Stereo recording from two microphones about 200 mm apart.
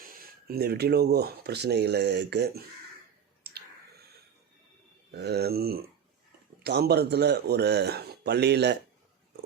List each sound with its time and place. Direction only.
0.0 s speech: 45° right (ahead or behind)
3.4 s clicking: 55° right (ahead or behind)
5.1 s a sound: 55° right (ahead or behind)
6.6 s speech: 55° right (ahead or behind)